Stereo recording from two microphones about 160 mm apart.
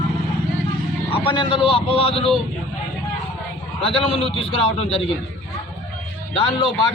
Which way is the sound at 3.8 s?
35° left (ahead or behind).